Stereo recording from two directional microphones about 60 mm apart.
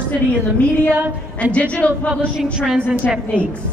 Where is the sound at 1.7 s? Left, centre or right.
Left.